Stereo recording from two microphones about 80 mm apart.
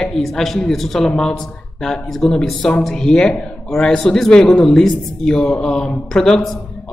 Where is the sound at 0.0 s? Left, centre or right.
Centre.